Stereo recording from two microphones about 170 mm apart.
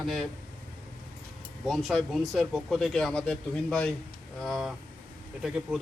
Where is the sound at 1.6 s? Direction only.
Centre (ahead or behind).